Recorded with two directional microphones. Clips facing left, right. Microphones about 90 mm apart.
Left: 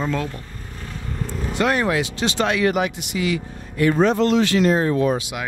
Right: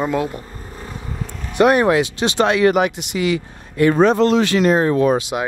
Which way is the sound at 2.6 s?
70° right (ahead or behind).